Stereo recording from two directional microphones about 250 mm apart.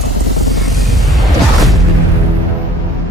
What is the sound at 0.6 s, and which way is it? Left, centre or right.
Music, centre.